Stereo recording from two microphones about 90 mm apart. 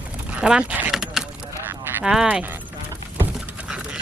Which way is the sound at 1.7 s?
25° right (ahead or behind).